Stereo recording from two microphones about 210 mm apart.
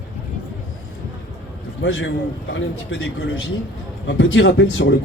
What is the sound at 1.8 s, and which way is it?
Speech, 70° left (ahead or behind).